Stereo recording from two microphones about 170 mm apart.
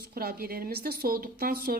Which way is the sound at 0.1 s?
60° right (ahead or behind).